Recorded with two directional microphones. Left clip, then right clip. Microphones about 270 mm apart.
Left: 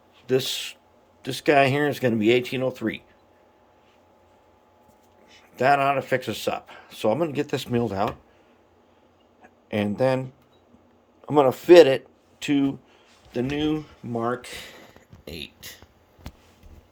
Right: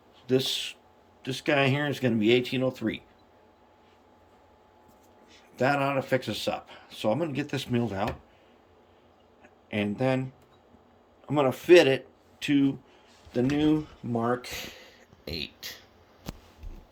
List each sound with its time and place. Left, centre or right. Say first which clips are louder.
0.3 s speech: left 2 dB; centre
5.3 s speech: left 6 dB; centre
9.4 s speech: left 4 dB; left
11.3 s speech: left 5 dB; centre
13.3 s speech: even; centre